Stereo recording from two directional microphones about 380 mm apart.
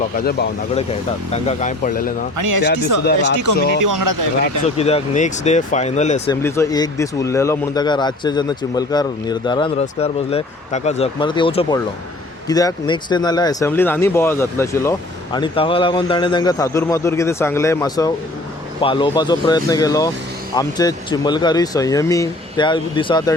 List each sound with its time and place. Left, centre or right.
0.2 s speech: left
2.4 s speech: right
4.8 s speech: centre